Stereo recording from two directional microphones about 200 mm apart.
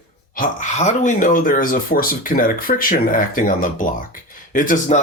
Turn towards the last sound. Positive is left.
turn(degrees=40)  # may be behind; listen again after turning